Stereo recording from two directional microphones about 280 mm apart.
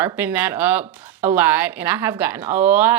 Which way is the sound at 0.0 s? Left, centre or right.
Centre.